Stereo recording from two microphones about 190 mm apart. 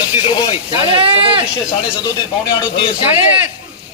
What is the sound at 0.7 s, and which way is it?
Speech, 30° right (ahead or behind).